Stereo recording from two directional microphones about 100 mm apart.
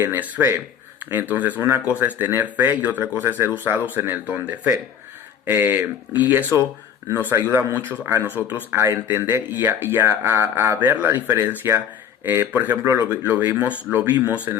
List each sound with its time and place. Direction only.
0.0 s speech: 20° right (ahead or behind)
10.1 s speech: 30° right (ahead or behind)